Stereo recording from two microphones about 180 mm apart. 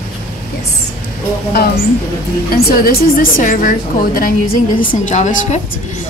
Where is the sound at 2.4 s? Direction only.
55° left (ahead or behind).